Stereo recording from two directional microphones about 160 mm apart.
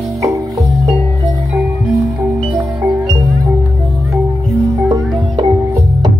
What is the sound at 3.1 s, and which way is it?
Music, 25° right (ahead or behind).